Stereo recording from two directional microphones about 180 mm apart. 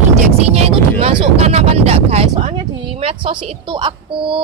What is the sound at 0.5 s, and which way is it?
Speech, 35° right (ahead or behind).